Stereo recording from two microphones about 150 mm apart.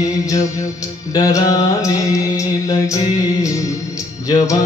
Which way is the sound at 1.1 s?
25° left (ahead or behind).